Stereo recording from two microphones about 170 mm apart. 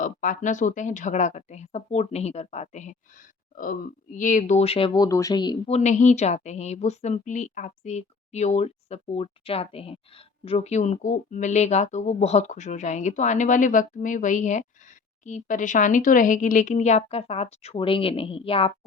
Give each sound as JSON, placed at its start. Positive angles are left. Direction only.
{"t": 0.0, "sound": "speech", "side_deg": 50}
{"t": 5.0, "sound": "speech", "side_deg": 20}
{"t": 5.7, "sound": "a woman's voice", "side_deg": 45}